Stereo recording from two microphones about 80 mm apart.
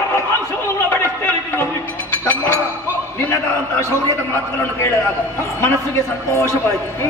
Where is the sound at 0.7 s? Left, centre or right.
Left.